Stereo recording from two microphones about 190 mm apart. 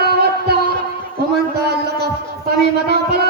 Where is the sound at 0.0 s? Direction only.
55° right (ahead or behind).